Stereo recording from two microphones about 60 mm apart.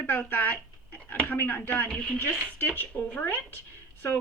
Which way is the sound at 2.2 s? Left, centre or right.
Left.